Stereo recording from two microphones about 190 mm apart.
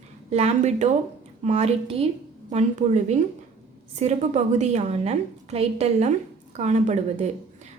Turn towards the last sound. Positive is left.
turn(degrees=-35)  # may be behind; listen again after turning